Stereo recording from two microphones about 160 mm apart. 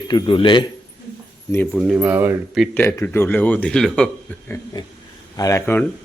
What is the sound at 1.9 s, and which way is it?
Speech, 10° right (ahead or behind).